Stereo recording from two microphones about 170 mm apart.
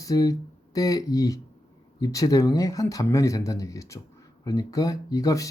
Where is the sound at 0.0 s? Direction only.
20° left (ahead or behind).